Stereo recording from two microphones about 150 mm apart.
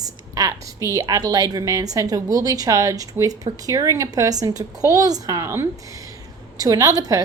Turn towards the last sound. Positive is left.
turn(degrees=-25)  # may be behind; listen again after turning